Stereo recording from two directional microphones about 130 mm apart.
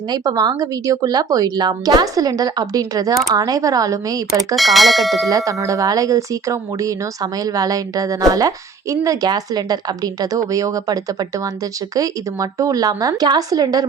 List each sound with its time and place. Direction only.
0.1 s speech: 30° right (ahead or behind)
4.5 s speech: centre (ahead or behind)
5.5 s speech: 25° right (ahead or behind)